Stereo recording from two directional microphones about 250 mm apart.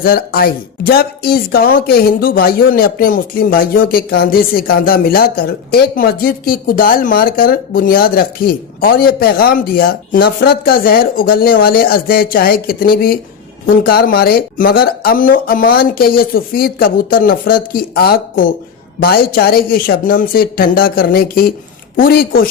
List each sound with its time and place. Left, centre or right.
0.0 s speech: left